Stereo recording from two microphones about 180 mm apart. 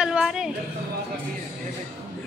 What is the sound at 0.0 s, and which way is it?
Music, 5° right (ahead or behind).